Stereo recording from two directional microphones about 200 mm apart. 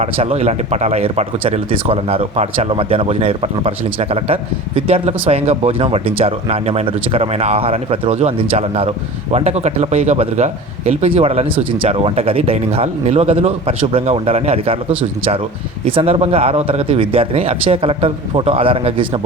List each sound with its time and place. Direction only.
0.0 s a man's voice: 30° right (ahead or behind)
15.9 s speech: 25° right (ahead or behind)